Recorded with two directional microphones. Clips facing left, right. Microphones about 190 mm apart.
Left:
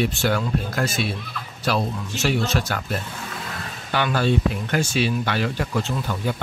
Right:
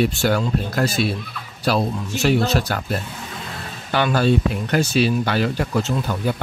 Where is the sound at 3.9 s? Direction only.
40° right (ahead or behind).